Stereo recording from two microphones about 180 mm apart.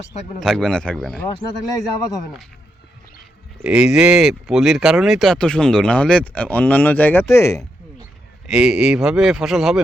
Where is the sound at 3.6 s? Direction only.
5° right (ahead or behind); by 7.6 s 15° left (ahead or behind).